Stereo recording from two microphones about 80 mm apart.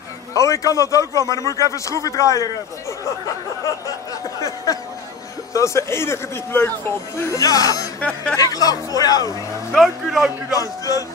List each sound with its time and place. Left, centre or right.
0.4 s speech: left
4.4 s a sound: left
5.5 s speech: left
7.3 s speech: left
9.7 s speech: centre
10.5 s speech: left